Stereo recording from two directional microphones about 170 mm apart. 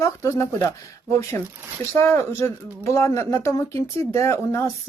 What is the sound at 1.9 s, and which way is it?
A woman's voice, 15° left (ahead or behind).